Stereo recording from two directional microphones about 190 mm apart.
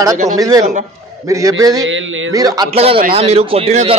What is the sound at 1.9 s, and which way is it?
Speech, 85° right.